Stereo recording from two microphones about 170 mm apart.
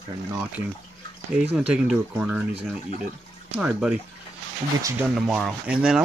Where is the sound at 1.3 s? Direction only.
5° right (ahead or behind).